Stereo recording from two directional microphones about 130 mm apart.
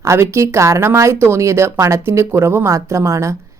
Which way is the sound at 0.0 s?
20° right (ahead or behind).